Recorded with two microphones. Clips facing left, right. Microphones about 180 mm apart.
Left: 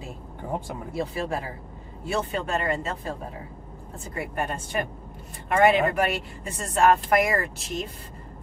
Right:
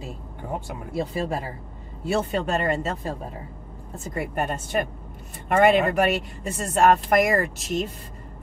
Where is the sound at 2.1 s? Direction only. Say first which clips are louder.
Right 3 dB; 40° right (ahead or behind).